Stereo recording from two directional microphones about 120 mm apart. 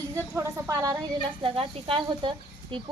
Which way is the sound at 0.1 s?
20° right (ahead or behind).